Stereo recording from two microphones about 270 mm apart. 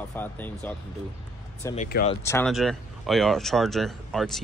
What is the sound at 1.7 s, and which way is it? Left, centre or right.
Speech, left.